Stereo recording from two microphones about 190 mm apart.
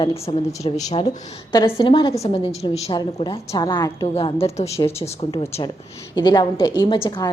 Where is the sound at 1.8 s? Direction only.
25° left (ahead or behind).